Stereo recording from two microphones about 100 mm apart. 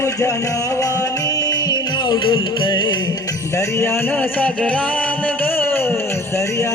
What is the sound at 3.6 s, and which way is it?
Music, 25° left (ahead or behind).